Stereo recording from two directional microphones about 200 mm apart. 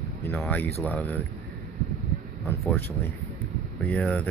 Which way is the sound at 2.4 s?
10° left (ahead or behind).